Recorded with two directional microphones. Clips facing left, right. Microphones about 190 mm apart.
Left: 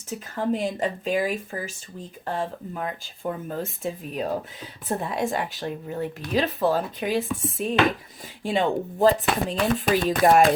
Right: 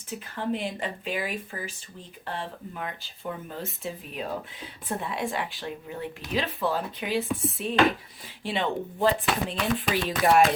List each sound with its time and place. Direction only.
0.3 s speech: 40° left (ahead or behind)